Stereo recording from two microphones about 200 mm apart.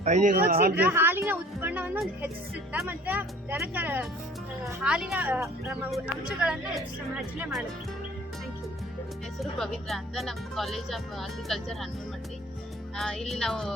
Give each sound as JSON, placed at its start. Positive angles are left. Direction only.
{"t": 0.0, "sound": "speech", "side_deg": -35}
{"t": 0.8, "sound": "a woman's voice", "side_deg": -10}
{"t": 9.4, "sound": "speech", "side_deg": 0}
{"t": 13.0, "sound": "speech", "side_deg": 0}